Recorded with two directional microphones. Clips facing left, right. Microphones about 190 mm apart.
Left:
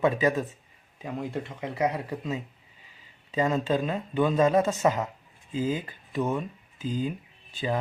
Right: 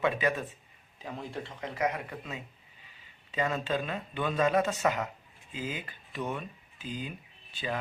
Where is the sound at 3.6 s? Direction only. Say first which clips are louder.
Left 5 dB; 35° left (ahead or behind).